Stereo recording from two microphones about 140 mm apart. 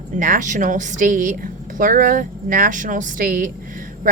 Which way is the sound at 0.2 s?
70° right (ahead or behind).